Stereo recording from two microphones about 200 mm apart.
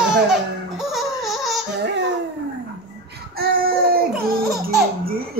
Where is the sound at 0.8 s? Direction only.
Centre (ahead or behind).